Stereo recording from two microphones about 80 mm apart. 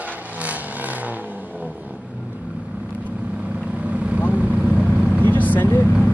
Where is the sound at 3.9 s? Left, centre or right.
Centre.